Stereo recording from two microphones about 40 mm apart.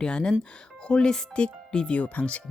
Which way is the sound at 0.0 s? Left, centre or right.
Left.